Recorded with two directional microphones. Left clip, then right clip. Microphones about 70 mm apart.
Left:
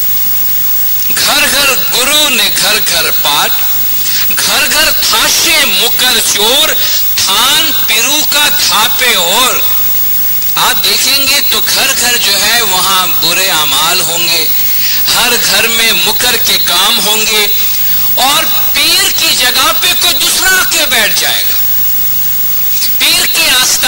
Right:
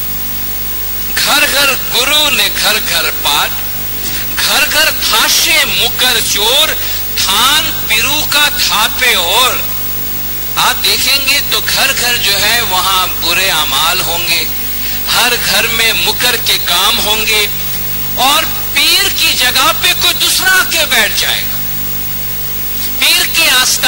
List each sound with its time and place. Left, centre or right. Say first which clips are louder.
1.1 s a man's voice: left 1 dB; left
22.9 s a man's voice: even; left